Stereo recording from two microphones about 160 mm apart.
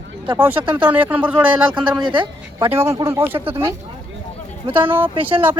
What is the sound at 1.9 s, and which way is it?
Speech, 30° right (ahead or behind).